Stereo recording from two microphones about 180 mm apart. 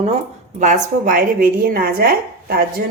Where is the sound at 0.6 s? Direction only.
45° right (ahead or behind).